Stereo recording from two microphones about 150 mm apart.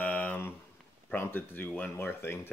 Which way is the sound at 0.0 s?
10° left (ahead or behind).